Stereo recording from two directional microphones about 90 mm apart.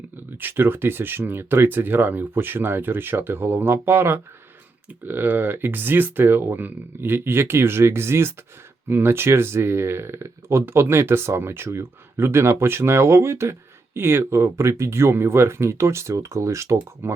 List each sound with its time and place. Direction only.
0.3 s speech: 25° right (ahead or behind)